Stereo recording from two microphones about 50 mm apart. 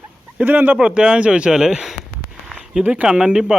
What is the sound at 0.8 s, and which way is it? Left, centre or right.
Speech, centre.